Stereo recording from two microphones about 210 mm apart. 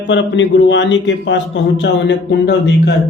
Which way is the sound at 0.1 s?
60° left (ahead or behind).